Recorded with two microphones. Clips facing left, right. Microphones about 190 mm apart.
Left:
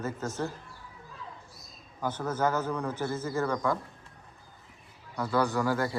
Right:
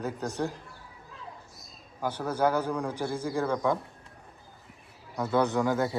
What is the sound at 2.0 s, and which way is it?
Speech, 10° right (ahead or behind).